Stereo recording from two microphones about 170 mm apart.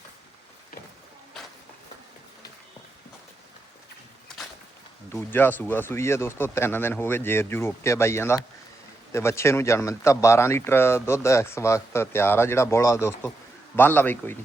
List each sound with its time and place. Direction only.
5.1 s speech: 10° left (ahead or behind)